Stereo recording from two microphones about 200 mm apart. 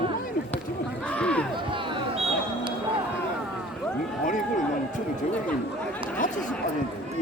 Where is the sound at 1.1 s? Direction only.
5° left (ahead or behind).